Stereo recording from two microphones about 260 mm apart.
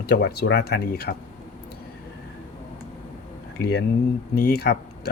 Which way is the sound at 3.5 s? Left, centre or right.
Left.